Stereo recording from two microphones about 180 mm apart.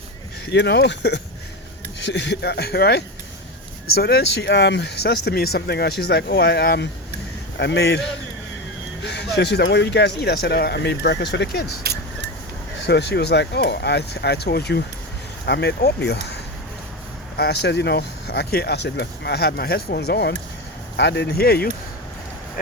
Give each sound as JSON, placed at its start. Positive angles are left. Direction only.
{"t": 0.5, "sound": "speech", "side_deg": 70}
{"t": 4.0, "sound": "speech", "side_deg": 65}
{"t": 9.0, "sound": "speech", "side_deg": 70}
{"t": 11.9, "sound": "vehicle", "side_deg": -60}
{"t": 12.8, "sound": "speech", "side_deg": 70}
{"t": 22.6, "sound": "speech", "side_deg": 50}